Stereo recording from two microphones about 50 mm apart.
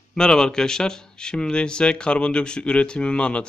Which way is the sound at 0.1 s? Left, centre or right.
Centre.